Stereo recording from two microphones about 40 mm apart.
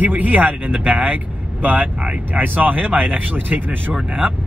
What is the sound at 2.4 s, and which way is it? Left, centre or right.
Speech, right.